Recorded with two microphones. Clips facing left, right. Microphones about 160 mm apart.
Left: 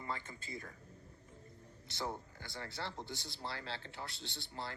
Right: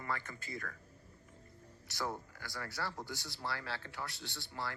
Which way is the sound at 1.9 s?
25° left (ahead or behind).